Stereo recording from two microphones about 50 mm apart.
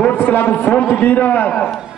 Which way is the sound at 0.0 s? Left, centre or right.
Left.